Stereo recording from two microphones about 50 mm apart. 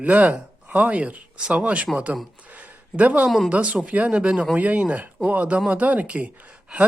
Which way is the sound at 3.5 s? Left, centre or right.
Right.